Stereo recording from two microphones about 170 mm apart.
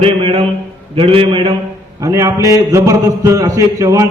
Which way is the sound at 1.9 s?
20° right (ahead or behind).